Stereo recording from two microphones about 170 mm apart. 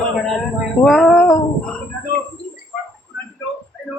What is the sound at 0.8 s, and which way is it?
Speech, 5° left (ahead or behind).